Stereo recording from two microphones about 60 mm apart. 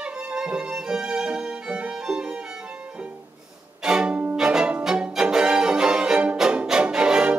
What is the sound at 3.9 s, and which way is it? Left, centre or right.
Music, centre.